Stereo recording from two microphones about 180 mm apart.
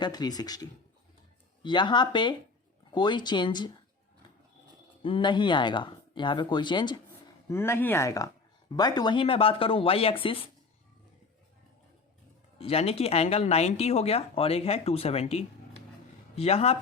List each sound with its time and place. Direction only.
0.0 s speech: 20° left (ahead or behind)
5.0 s speech: 25° left (ahead or behind)
7.4 s speech: 15° left (ahead or behind); by 10.5 s 30° left (ahead or behind)
12.5 s speech: 35° left (ahead or behind)